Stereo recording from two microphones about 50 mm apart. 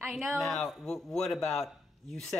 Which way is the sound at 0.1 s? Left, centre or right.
Centre.